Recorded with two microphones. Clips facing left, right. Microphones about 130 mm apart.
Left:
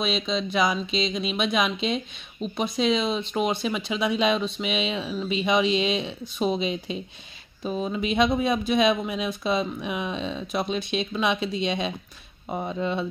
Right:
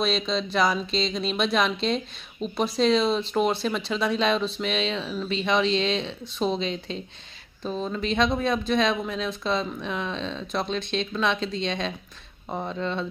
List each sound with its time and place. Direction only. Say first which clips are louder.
0.0 s speech: right 1 dB; 5° left (ahead or behind)